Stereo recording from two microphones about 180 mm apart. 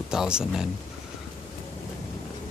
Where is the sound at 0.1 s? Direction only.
5° right (ahead or behind).